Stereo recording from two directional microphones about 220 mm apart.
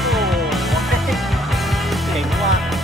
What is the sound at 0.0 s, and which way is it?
Music, centre (ahead or behind).